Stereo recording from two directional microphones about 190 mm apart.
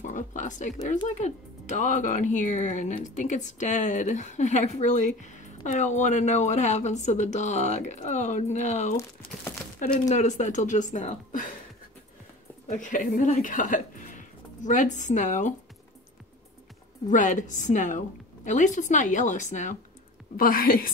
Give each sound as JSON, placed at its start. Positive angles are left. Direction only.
{"t": 0.0, "sound": "a woman's voice", "side_deg": 40}
{"t": 12.6, "sound": "speech", "side_deg": 40}
{"t": 17.1, "sound": "a woman's voice", "side_deg": 40}